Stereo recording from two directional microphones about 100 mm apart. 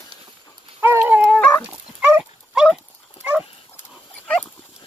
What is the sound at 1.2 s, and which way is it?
Dog, 10° left (ahead or behind).